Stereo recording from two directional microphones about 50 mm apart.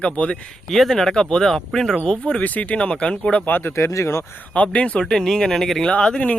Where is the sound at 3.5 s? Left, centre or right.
Left.